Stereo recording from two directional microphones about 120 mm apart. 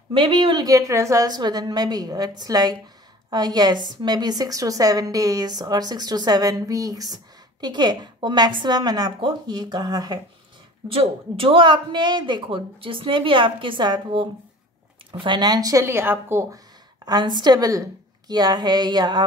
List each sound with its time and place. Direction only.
0.1 s speech: 45° right (ahead or behind)
0.7 s a woman's voice: 25° right (ahead or behind)
10.9 s speech: 50° right (ahead or behind); by 16.5 s 20° right (ahead or behind)
17.0 s a woman's voice: 35° right (ahead or behind)